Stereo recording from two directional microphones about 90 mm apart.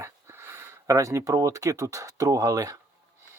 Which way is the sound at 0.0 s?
30° right (ahead or behind).